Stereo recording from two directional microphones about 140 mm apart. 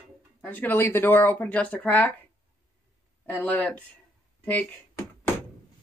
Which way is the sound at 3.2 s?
10° left (ahead or behind).